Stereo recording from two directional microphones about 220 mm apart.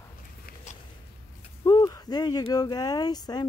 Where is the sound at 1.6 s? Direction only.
15° left (ahead or behind).